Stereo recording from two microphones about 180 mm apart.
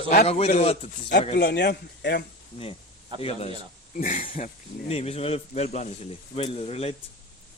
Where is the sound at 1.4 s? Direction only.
70° left (ahead or behind).